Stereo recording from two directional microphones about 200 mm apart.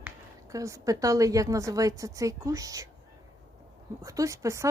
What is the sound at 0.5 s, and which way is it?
A woman's voice, 15° right (ahead or behind).